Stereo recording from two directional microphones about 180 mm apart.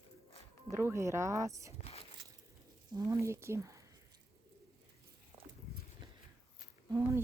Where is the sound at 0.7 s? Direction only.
15° right (ahead or behind).